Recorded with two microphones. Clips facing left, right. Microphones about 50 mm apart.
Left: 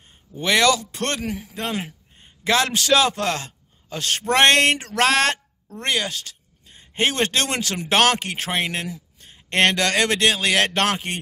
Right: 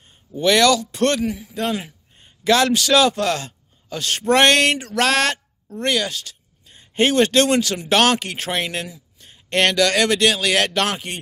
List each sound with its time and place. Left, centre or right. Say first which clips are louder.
0.4 s a man's voice: right 3 dB; left
8.8 s a sound: left 4 dB; left
9.3 s speech: even; left